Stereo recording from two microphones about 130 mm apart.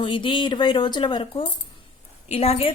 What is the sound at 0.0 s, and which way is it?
A woman's voice, 40° left (ahead or behind).